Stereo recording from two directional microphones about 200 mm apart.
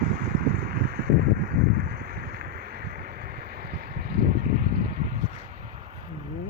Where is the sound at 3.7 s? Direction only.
45° right (ahead or behind).